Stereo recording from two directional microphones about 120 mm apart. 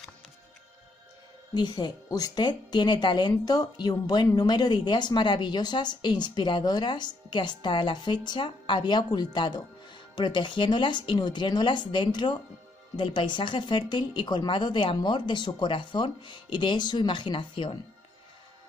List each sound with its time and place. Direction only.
1.5 s speech: 35° left (ahead or behind)